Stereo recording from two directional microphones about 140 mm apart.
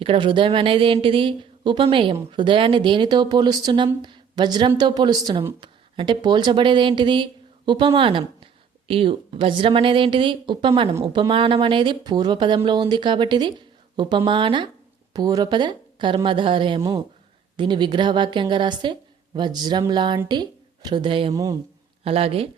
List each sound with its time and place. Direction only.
0.0 s a woman's voice: 40° right (ahead or behind)
21.3 s speech: 25° right (ahead or behind)
22.0 s speech: 45° right (ahead or behind)